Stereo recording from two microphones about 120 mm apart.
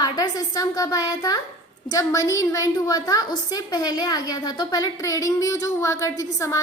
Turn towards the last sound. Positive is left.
turn(degrees=25)  # may be behind; listen again after turning